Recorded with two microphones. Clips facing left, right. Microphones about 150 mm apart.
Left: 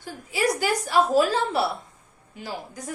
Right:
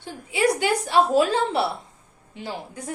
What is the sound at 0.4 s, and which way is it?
A woman's voice, 30° right (ahead or behind).